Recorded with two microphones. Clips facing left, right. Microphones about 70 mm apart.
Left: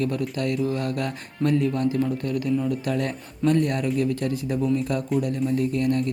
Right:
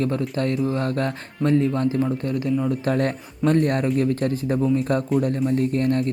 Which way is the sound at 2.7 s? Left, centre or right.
Right.